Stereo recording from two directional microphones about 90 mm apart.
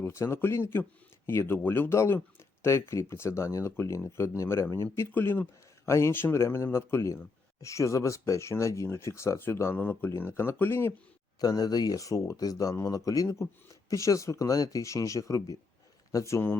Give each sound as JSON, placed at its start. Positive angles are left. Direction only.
{"t": 0.0, "sound": "speech", "side_deg": 30}
{"t": 11.3, "sound": "speech", "side_deg": 45}